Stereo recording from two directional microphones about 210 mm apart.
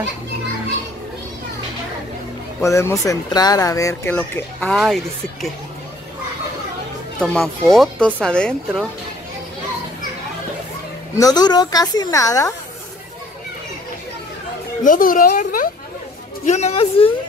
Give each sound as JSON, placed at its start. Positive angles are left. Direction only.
{"t": 2.6, "sound": "speech", "side_deg": 15}
{"t": 7.2, "sound": "speech", "side_deg": 5}
{"t": 11.1, "sound": "speech", "side_deg": 20}
{"t": 14.8, "sound": "speech", "side_deg": 40}